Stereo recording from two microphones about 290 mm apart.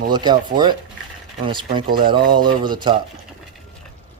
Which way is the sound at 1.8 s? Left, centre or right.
Right.